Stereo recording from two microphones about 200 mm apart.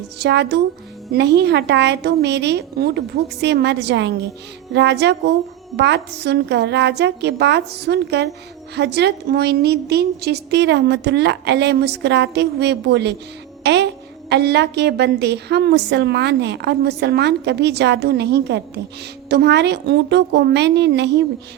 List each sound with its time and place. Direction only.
0.2 s a woman's voice: 55° right (ahead or behind)
14.3 s a woman's voice: 55° right (ahead or behind)